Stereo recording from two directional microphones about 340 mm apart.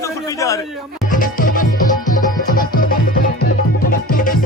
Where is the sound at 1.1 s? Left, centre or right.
Left.